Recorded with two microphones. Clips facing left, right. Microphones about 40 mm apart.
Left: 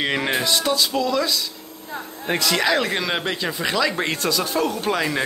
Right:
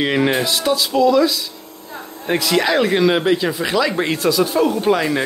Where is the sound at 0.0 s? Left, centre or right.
Centre.